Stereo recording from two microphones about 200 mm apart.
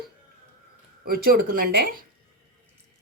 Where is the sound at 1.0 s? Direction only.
50° right (ahead or behind).